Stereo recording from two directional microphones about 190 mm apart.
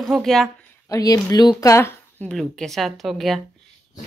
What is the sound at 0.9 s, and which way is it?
A woman's voice, 20° left (ahead or behind).